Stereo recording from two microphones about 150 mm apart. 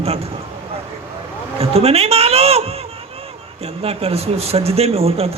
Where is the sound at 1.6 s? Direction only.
40° right (ahead or behind).